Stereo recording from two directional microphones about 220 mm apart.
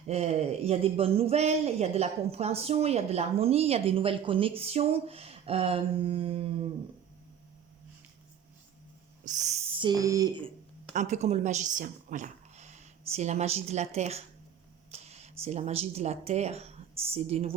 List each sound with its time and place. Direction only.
0.1 s speech: 30° right (ahead or behind)
9.2 s a sound: 30° right (ahead or behind)
9.9 s speech: 15° right (ahead or behind)
10.9 s a woman's voice: 30° right (ahead or behind)